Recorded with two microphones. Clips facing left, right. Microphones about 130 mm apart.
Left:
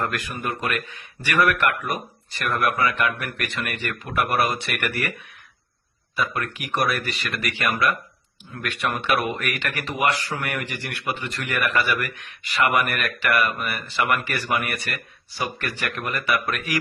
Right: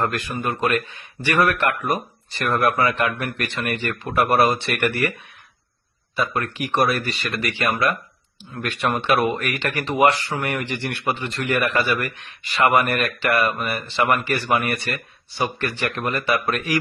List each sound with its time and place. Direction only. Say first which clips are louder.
0.0 s speech: right 3 dB; 30° right (ahead or behind)
6.1 s speech: right 3 dB; 30° right (ahead or behind)